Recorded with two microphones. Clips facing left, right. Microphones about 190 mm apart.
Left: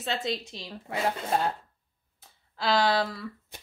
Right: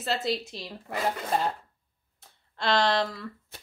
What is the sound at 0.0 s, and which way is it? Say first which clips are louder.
Speech: right 2 dB; centre (ahead or behind).